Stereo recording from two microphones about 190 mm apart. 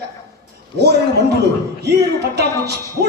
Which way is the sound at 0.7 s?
60° right (ahead or behind).